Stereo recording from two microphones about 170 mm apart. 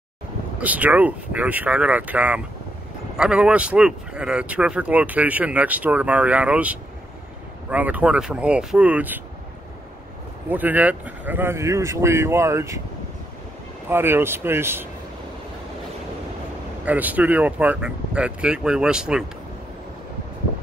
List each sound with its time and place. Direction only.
0.6 s speech: 10° right (ahead or behind)
10.5 s speech: 10° right (ahead or behind)
13.8 s speech: 15° right (ahead or behind)
16.8 s speech: 10° right (ahead or behind)